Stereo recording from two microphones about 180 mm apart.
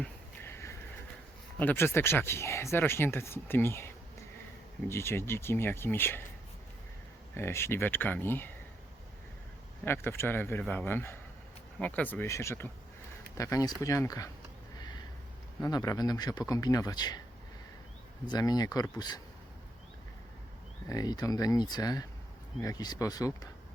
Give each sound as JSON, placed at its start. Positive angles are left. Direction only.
{"t": 0.0, "sound": "a sound", "side_deg": 15}
{"t": 1.5, "sound": "speech", "side_deg": 10}
{"t": 7.3, "sound": "speech", "side_deg": 15}
{"t": 9.8, "sound": "speech", "side_deg": 15}
{"t": 15.6, "sound": "speech", "side_deg": 20}
{"t": 18.3, "sound": "speech", "side_deg": 20}
{"t": 20.9, "sound": "speech", "side_deg": 20}